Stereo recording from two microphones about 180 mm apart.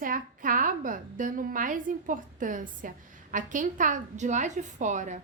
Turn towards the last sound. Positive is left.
turn(degrees=-45)  # may be behind; listen again after turning